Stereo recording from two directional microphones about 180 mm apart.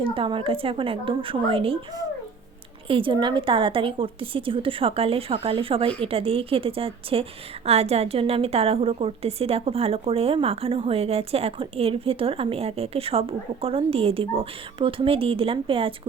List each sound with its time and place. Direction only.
0.0 s a woman's voice: 30° right (ahead or behind)